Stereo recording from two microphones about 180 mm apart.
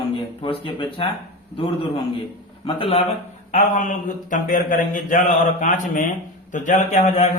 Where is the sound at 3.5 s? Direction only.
45° left (ahead or behind).